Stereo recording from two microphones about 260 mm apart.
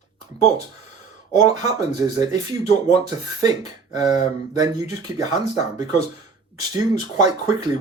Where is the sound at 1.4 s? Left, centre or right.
Centre.